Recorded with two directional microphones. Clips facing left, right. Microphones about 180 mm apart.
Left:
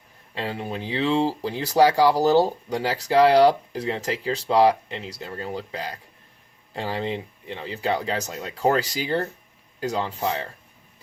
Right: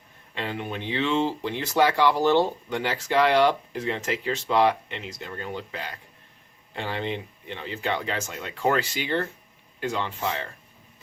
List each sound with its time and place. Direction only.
0.3 s speech: 35° left (ahead or behind)